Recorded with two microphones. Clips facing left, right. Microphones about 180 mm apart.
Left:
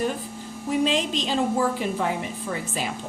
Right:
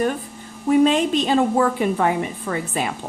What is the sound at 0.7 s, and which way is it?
Speech, 55° right (ahead or behind).